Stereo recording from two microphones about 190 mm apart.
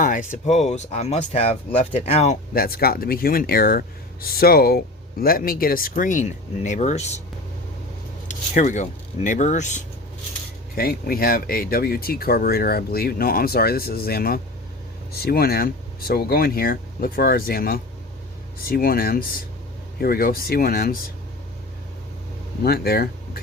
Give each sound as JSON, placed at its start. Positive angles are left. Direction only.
{"t": 0.0, "sound": "speech", "side_deg": 45}
{"t": 8.3, "sound": "speech", "side_deg": 40}
{"t": 10.8, "sound": "speech", "side_deg": 50}
{"t": 22.6, "sound": "speech", "side_deg": 55}